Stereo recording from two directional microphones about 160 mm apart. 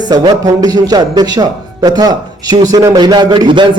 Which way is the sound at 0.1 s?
25° right (ahead or behind).